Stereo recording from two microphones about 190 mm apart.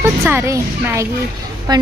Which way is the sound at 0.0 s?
15° right (ahead or behind).